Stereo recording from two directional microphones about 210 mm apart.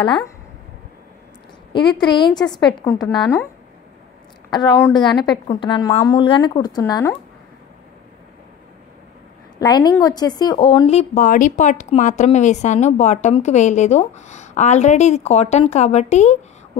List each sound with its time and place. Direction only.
0.0 s a woman's voice: 20° left (ahead or behind)
1.7 s a woman's voice: 20° left (ahead or behind)
4.5 s a woman's voice: 20° left (ahead or behind)
9.6 s speech: 20° left (ahead or behind)